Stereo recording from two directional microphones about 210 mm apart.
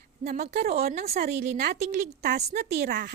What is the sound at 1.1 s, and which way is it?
Speech, 30° right (ahead or behind).